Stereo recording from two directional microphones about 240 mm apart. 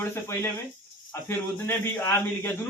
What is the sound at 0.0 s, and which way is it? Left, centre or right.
A man's voice, centre.